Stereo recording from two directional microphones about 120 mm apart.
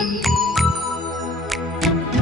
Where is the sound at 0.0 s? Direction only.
Centre (ahead or behind).